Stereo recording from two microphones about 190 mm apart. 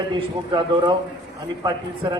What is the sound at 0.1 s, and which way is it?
A man's voice, 25° right (ahead or behind).